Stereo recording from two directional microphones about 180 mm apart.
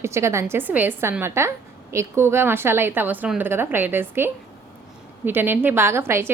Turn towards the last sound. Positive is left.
turn(degrees=-15)  # may be behind; listen again after turning